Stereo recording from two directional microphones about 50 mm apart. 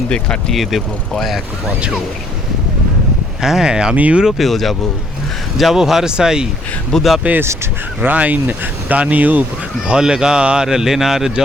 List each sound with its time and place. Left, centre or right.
0.1 s speech: centre
0.5 s speech: centre
3.4 s speech: centre
3.9 s speech: right
4.2 s speech: centre
7.2 s speech: right
9.8 s speech: centre